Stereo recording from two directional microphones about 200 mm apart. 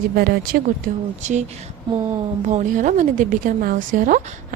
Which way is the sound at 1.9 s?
20° right (ahead or behind).